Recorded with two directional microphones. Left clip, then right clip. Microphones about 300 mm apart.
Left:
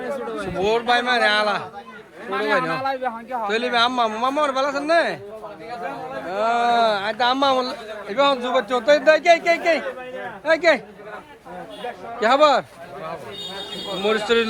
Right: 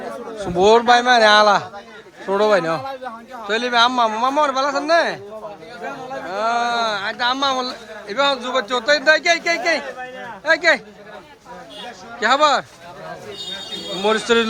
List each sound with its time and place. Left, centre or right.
0.6 s speech: centre
2.8 s a man's voice: left
3.5 s speech: centre
6.2 s speech: centre
12.2 s speech: centre
14.0 s speech: centre